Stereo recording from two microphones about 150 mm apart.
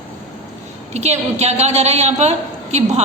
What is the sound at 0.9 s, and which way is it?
A man's voice, 50° right (ahead or behind).